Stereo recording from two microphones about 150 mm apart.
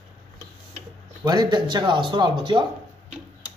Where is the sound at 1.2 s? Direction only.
25° right (ahead or behind).